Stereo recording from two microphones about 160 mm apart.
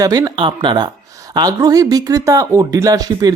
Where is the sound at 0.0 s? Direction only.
25° right (ahead or behind).